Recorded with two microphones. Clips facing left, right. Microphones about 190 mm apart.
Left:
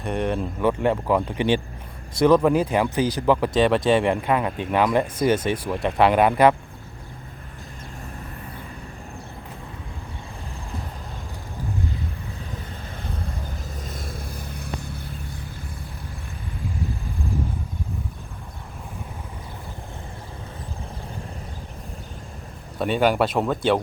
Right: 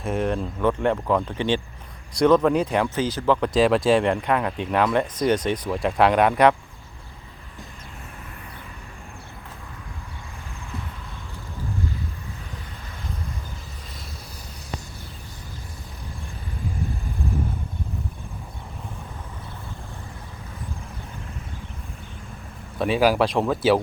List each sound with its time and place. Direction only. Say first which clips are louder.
0.0 s speech: even; centre (ahead or behind)
3.5 s speech: right 3 dB; centre (ahead or behind)
13.9 s vehicle: left 7 dB; 50° left (ahead or behind)
22.8 s speech: right 1 dB; centre (ahead or behind)